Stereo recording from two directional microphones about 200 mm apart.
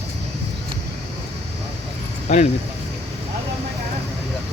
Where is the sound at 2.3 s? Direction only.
35° left (ahead or behind).